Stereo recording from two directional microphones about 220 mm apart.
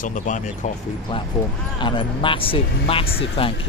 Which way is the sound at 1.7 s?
20° left (ahead or behind).